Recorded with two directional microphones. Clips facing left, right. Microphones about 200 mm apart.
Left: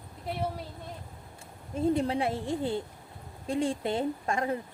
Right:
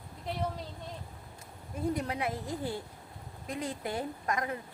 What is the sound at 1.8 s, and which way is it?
A woman's voice, 25° left (ahead or behind).